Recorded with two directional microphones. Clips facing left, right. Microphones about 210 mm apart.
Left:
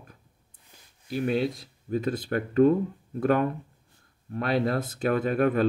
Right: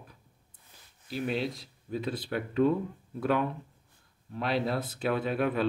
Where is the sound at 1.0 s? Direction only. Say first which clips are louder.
Left 5 dB; 50° left (ahead or behind).